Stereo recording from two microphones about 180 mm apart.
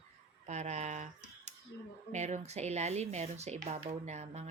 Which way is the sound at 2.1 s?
40° right (ahead or behind).